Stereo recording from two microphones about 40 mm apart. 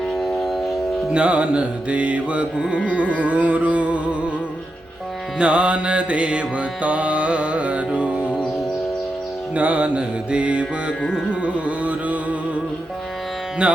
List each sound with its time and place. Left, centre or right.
0.2 s train: centre
1.1 s music: right
3.0 s music: right
5.4 s music: right
9.6 s music: right
11.3 s carnatic music: right
13.6 s music: right